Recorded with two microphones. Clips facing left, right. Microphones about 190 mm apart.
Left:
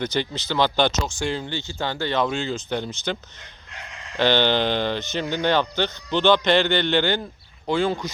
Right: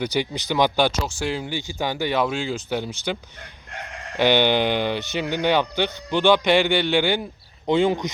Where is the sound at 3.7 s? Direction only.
55° right (ahead or behind).